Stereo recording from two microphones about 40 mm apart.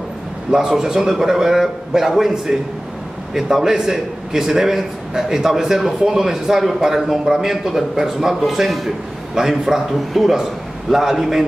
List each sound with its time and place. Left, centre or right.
0.5 s a man's voice: centre